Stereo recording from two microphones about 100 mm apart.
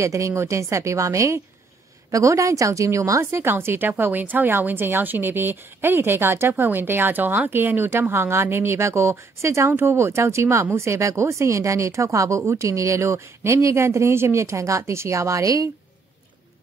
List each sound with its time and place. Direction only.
0.0 s a woman's voice: 30° right (ahead or behind)